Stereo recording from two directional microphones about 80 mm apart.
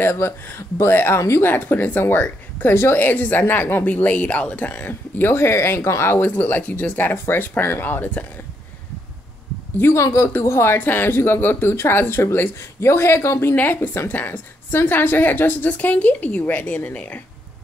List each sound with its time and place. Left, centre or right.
0.0 s speech: left
9.8 s speech: left; by 17.2 s centre